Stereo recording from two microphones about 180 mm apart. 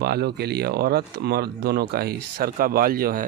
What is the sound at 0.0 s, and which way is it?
Speech, 65° right (ahead or behind).